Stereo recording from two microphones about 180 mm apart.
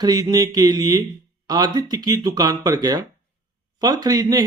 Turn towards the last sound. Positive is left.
turn(degrees=-20)  # may be behind; listen again after turning